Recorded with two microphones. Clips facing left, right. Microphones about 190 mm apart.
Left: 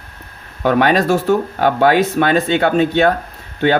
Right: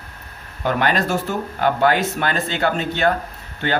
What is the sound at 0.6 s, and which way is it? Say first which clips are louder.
Speech: left 6 dB; 65° left (ahead or behind).